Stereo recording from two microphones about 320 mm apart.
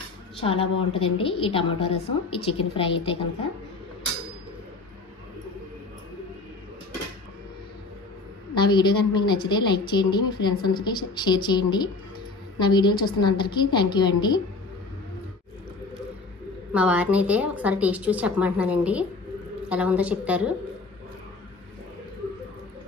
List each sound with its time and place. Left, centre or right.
0.4 s a woman's voice: centre
8.5 s a woman's voice: centre
16.7 s a woman's voice: centre